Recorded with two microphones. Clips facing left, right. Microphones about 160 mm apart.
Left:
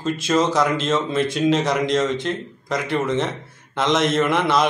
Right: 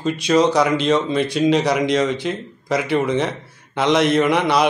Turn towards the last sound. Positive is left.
turn(degrees=0)  # may be behind; listen again after turning